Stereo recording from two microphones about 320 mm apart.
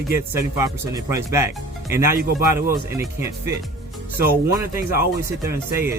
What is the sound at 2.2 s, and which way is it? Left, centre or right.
Speech, right.